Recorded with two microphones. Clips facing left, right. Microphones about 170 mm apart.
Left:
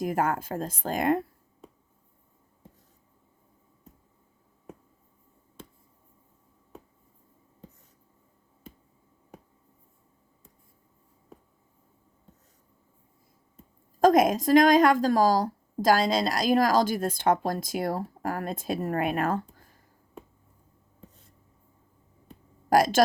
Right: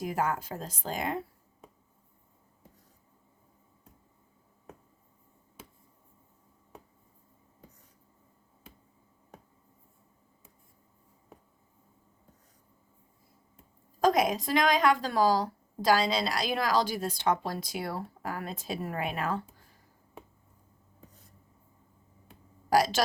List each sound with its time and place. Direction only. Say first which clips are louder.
0.0 s a woman's voice: left 4 dB; 50° left (ahead or behind)
5.6 s a sound: left 4 dB; 10° right (ahead or behind)
14.0 s a woman's voice: left 6 dB; 45° left (ahead or behind)
22.7 s a woman's voice: left 3 dB; 50° left (ahead or behind)